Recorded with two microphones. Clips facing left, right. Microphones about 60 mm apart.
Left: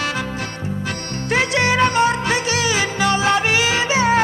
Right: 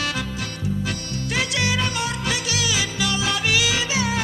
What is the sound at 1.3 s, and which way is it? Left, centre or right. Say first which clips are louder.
Music: left 7 dB; left.